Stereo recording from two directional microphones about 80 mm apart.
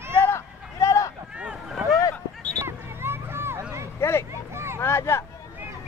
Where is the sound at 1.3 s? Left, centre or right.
Centre.